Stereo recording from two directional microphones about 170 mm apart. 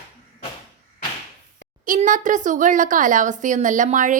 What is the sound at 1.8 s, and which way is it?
Speech, 50° right (ahead or behind).